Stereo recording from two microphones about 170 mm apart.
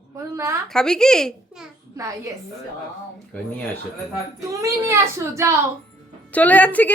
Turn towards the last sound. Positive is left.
turn(degrees=10)  # may be behind; listen again after turning